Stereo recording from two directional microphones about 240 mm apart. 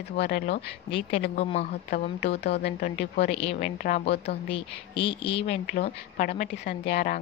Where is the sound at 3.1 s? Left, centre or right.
Left.